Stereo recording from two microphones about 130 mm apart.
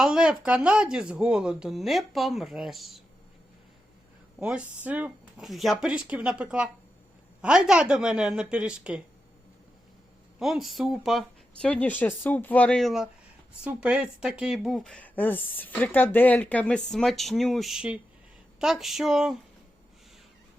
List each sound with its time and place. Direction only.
0.0 s speech: 5° right (ahead or behind)
4.4 s a woman's voice: 10° right (ahead or behind)
5.5 s a woman's voice: centre (ahead or behind)
10.4 s speech: centre (ahead or behind)